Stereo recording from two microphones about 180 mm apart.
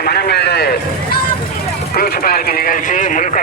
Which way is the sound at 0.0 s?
60° left (ahead or behind).